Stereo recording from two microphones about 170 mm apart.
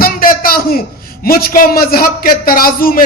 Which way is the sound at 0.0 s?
60° left (ahead or behind).